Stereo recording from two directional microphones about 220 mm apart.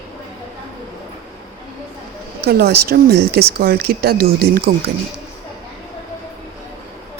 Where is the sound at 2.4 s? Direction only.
45° right (ahead or behind).